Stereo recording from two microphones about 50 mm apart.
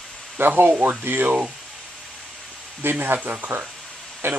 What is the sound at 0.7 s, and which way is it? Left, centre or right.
Speech, right.